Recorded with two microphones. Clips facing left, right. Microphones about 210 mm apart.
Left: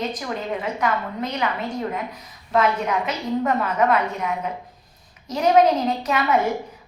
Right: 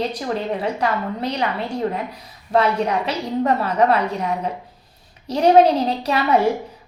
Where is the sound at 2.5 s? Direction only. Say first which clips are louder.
Right 2 dB; 35° right (ahead or behind).